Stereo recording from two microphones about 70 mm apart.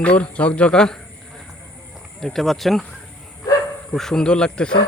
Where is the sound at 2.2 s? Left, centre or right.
Centre.